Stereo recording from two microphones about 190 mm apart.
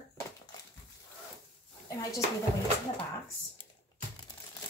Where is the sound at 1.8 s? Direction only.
20° left (ahead or behind).